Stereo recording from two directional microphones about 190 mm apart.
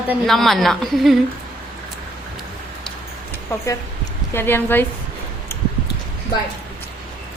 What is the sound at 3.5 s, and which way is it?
A woman's voice, 15° left (ahead or behind).